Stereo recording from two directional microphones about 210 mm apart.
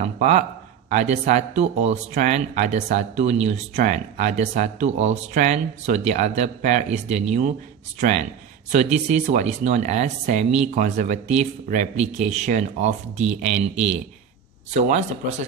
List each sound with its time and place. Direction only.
0.0 s speech: 35° right (ahead or behind)